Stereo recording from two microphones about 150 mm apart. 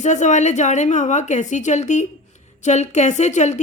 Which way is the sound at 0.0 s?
55° left (ahead or behind).